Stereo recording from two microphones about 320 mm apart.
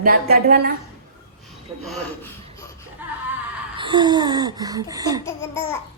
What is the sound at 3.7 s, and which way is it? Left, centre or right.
A woman's voice, centre.